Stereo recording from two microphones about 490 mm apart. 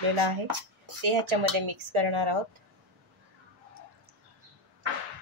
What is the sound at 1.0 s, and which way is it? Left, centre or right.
A woman's voice, right.